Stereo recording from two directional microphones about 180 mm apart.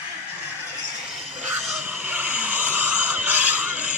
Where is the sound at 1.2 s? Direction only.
5° right (ahead or behind).